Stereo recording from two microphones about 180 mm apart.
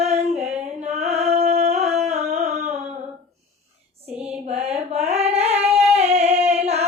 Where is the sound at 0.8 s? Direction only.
35° right (ahead or behind).